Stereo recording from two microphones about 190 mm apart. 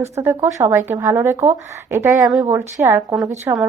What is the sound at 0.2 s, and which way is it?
Speech, 10° right (ahead or behind).